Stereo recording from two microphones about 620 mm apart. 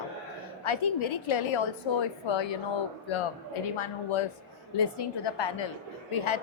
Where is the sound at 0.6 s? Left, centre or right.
Left.